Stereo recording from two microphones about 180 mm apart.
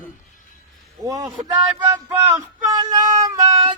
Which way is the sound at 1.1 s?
20° right (ahead or behind).